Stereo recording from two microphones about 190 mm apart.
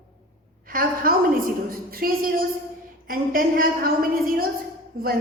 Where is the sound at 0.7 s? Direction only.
50° right (ahead or behind).